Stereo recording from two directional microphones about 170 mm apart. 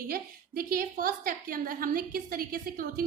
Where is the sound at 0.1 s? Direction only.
60° right (ahead or behind).